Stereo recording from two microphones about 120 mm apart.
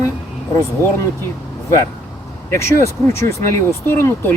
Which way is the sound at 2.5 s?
25° left (ahead or behind).